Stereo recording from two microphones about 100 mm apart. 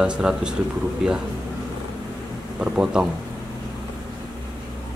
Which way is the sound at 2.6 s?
10° right (ahead or behind).